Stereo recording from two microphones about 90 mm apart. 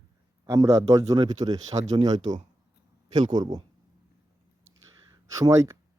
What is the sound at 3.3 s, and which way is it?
Speech, 50° right (ahead or behind).